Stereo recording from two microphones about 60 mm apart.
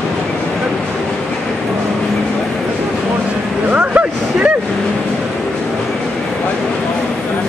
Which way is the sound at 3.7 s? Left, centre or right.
Right.